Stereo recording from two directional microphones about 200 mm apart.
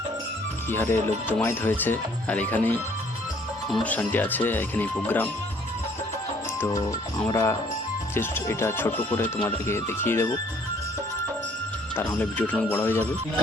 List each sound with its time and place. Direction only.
0.7 s speech: 10° left (ahead or behind)
6.6 s speech: 15° left (ahead or behind)
12.1 s speech: 5° left (ahead or behind)